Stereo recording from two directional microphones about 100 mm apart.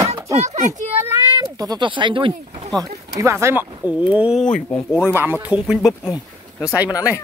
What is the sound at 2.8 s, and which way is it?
Speech, 30° right (ahead or behind).